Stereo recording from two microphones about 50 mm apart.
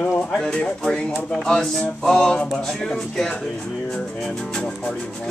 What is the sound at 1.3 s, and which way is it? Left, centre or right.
Speech, centre.